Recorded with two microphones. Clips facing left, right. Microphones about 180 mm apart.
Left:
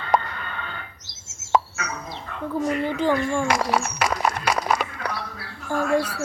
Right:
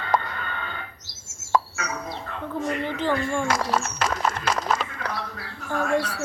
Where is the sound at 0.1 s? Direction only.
20° left (ahead or behind).